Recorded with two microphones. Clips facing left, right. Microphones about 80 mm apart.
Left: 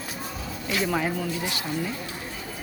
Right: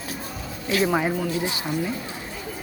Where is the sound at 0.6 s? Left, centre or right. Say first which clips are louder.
Right 4 dB; centre.